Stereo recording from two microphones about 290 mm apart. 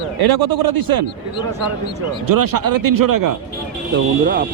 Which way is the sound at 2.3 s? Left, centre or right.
Right.